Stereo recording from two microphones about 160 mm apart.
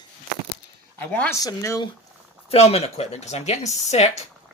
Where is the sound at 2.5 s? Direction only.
40° left (ahead or behind).